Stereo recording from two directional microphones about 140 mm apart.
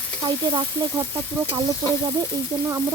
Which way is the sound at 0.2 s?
30° right (ahead or behind).